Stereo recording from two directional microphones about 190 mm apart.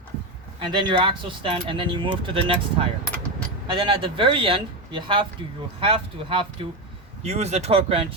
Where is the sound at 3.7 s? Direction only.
25° right (ahead or behind).